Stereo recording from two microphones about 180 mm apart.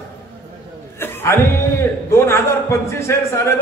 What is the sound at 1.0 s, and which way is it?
Speech, 15° left (ahead or behind).